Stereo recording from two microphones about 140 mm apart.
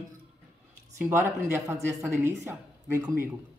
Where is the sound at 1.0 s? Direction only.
15° right (ahead or behind).